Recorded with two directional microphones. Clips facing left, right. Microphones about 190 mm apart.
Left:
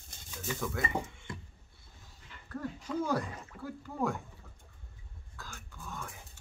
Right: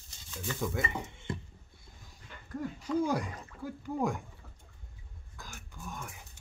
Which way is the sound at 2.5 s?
15° right (ahead or behind).